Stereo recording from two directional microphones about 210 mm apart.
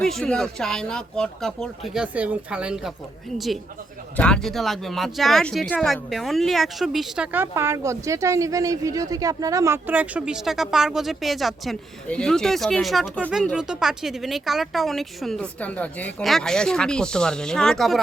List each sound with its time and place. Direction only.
0.0 s speech: centre (ahead or behind)